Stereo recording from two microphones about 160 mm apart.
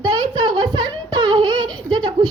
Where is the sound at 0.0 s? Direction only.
30° right (ahead or behind).